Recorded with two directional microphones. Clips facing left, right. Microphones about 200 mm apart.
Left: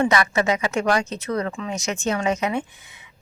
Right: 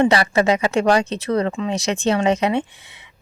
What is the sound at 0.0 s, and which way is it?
Speech, 30° right (ahead or behind).